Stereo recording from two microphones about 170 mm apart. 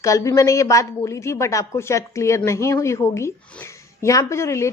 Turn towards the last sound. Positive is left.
turn(degrees=15)  # may be behind; listen again after turning